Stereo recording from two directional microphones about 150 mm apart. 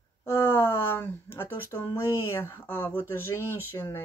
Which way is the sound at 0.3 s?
15° left (ahead or behind).